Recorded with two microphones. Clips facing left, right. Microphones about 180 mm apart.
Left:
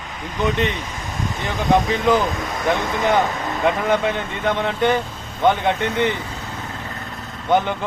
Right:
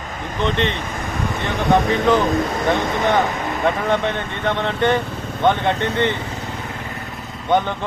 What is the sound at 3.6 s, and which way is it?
Speech, 5° left (ahead or behind).